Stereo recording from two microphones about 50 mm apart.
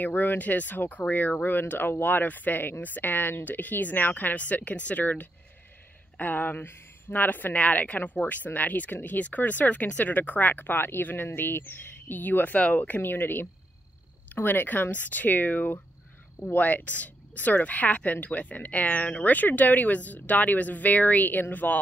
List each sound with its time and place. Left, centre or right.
0.0 s speech: left